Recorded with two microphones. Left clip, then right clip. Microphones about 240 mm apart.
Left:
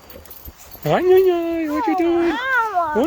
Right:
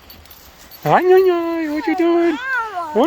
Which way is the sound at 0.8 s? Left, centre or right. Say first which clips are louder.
Right 2 dB; centre.